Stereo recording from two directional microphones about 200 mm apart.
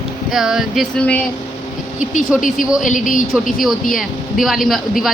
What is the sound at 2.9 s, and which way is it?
Speech, 40° left (ahead or behind).